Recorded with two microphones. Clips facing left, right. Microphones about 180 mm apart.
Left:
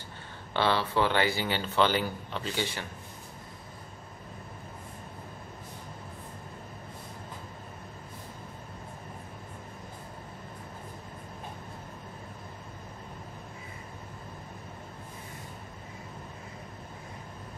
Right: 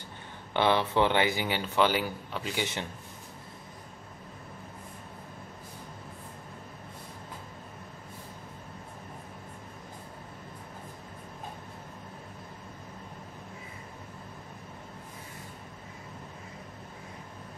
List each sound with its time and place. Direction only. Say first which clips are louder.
0.5 s speech: right 2 dB; 20° right (ahead or behind)